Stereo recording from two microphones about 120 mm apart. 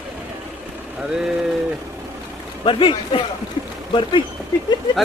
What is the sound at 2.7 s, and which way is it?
Speech, 45° left (ahead or behind).